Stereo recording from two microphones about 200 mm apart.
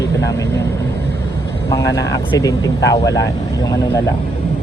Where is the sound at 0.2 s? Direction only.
15° left (ahead or behind).